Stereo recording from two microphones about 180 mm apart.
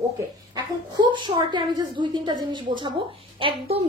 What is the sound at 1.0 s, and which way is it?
A woman's voice, 25° right (ahead or behind).